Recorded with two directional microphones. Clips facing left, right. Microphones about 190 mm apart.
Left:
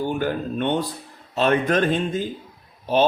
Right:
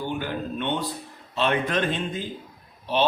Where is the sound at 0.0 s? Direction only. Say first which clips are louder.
Left 5 dB; 45° left (ahead or behind).